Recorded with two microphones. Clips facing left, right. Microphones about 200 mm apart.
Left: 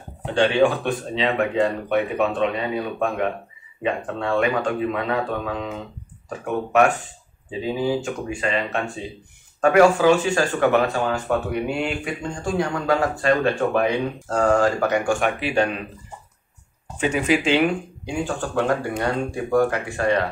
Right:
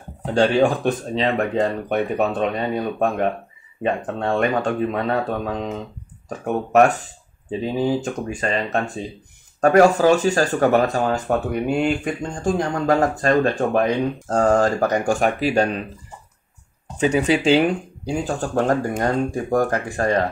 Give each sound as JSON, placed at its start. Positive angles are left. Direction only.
{"t": 0.2, "sound": "speech", "side_deg": -40}
{"t": 8.0, "sound": "speech", "side_deg": -40}
{"t": 17.0, "sound": "speech", "side_deg": -35}